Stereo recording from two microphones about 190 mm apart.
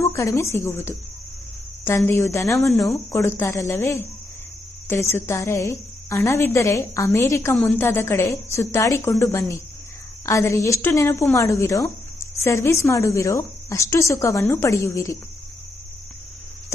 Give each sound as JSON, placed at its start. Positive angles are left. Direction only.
{"t": 0.0, "sound": "a woman's voice", "side_deg": 15}
{"t": 2.7, "sound": "speech", "side_deg": 0}
{"t": 3.1, "sound": "a woman's voice", "side_deg": 15}